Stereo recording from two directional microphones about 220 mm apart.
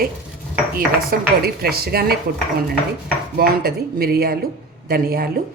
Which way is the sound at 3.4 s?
45° right (ahead or behind).